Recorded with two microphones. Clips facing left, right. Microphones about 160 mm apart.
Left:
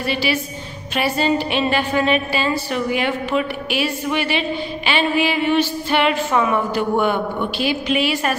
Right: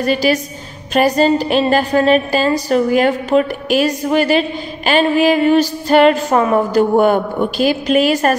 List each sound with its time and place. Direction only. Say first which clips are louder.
0.0 s a woman's voice: right 6 dB; 40° right (ahead or behind)